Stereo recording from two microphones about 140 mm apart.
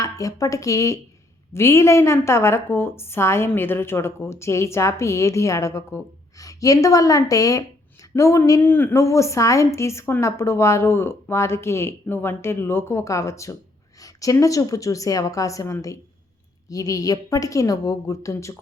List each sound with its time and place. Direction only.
0.0 s a woman's voice: 25° left (ahead or behind)